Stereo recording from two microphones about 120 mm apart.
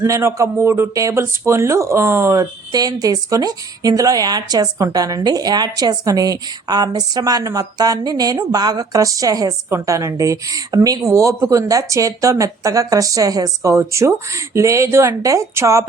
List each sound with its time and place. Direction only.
0.0 s a man's voice: 25° right (ahead or behind)